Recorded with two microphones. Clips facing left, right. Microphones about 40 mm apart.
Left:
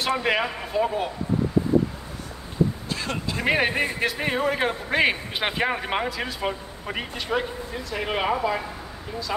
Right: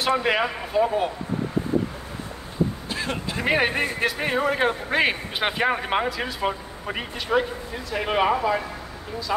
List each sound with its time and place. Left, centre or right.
0.0 s a man's voice: centre
2.9 s a sound: centre
3.3 s a man's voice: centre